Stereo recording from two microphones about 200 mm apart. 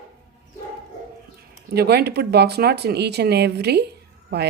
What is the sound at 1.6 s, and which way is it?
Speech, 55° right (ahead or behind).